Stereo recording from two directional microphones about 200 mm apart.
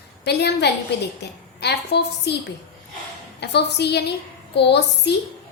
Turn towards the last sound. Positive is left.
turn(degrees=60)  # may be behind; listen again after turning